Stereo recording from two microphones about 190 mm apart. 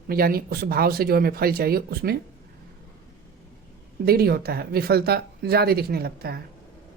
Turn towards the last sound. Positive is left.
turn(degrees=-55)  # may be behind; listen again after turning